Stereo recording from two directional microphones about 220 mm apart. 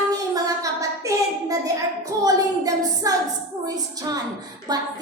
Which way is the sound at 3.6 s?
15° right (ahead or behind).